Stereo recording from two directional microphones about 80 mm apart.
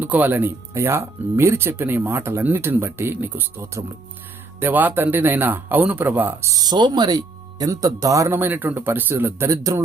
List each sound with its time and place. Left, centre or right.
0.0 s speech: right
0.7 s speech: right
6.4 s speech: right
6.7 s speech: right
7.7 s speech: right
8.4 s speech: right